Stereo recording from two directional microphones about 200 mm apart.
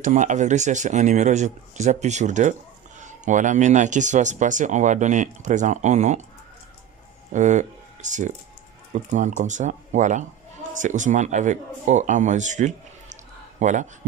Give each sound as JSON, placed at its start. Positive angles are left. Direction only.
{"t": 0.0, "sound": "speech", "side_deg": -40}
{"t": 7.3, "sound": "speech", "side_deg": -35}